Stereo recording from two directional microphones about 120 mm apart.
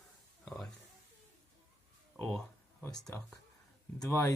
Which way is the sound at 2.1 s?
5° left (ahead or behind).